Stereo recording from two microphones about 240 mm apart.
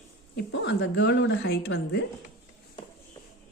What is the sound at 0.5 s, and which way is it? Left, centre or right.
A woman's voice, left.